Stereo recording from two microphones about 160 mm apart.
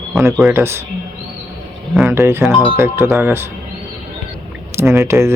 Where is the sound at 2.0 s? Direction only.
15° right (ahead or behind).